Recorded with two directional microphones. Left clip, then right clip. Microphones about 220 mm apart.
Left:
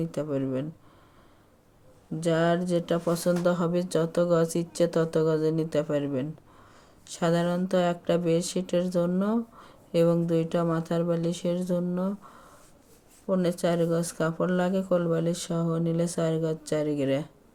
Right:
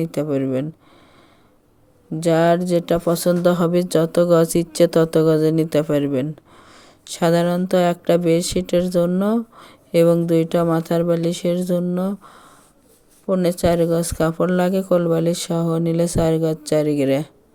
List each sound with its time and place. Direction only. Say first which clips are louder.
0.0 s speech: right 8 dB; 40° right (ahead or behind)
2.2 s speech: right 9 dB; 40° right (ahead or behind)